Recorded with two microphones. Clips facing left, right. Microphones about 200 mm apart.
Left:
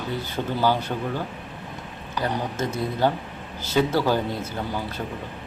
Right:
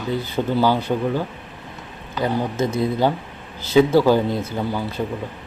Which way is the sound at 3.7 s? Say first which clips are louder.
Right 7 dB; 10° right (ahead or behind).